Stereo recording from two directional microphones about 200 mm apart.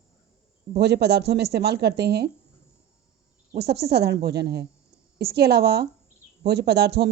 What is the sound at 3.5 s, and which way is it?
Speech, 55° right (ahead or behind).